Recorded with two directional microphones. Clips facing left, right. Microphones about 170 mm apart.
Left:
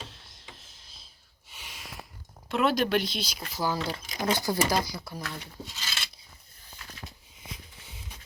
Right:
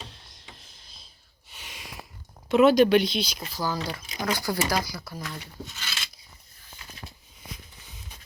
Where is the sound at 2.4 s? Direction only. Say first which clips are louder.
Right 8 dB; centre (ahead or behind).